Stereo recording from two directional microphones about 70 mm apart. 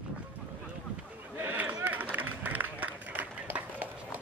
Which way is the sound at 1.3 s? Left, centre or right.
Right.